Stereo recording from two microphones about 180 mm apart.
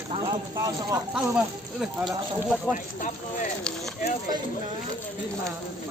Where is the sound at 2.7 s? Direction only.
45° left (ahead or behind).